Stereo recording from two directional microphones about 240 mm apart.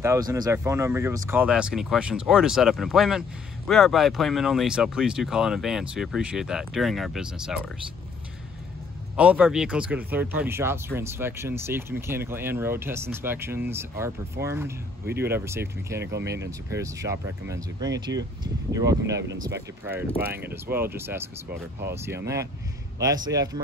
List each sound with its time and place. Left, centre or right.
0.0 s speech: centre
9.1 s speech: centre
16.0 s speech: right
16.4 s speech: centre